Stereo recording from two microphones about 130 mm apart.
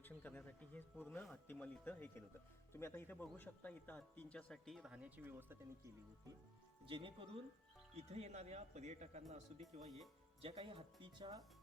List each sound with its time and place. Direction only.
0.0 s speech: 15° left (ahead or behind); by 5.5 s 15° right (ahead or behind)
6.8 s speech: 40° right (ahead or behind)
7.9 s a man's voice: 55° right (ahead or behind)
10.4 s speech: 45° right (ahead or behind)